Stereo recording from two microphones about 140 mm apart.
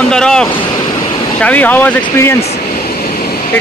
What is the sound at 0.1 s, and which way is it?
Vehicle, 5° left (ahead or behind).